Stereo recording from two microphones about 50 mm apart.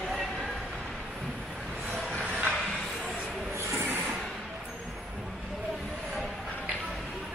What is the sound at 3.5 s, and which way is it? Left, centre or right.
Rub, right.